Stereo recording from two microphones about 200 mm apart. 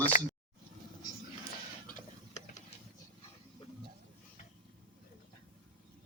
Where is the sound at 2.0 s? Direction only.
35° left (ahead or behind).